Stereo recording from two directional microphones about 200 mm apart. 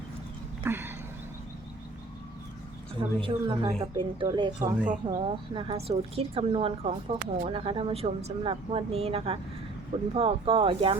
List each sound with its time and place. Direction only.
0.6 s a sound: 10° right (ahead or behind)
3.2 s a woman's voice: 25° right (ahead or behind)
4.6 s a woman's voice: 5° right (ahead or behind)
5.0 s a woman's voice: 25° right (ahead or behind)